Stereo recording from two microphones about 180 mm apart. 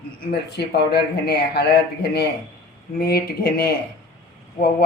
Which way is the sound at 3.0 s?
60° left (ahead or behind).